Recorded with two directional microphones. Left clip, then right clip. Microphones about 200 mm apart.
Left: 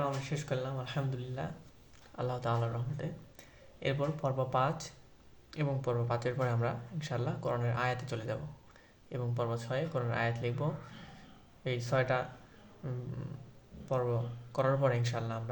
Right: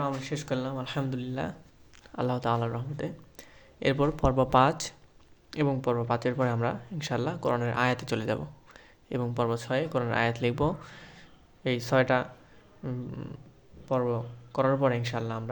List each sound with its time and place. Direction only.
0.0 s speech: 55° right (ahead or behind)
2.1 s speech: 40° right (ahead or behind)
12.8 s speech: 35° right (ahead or behind)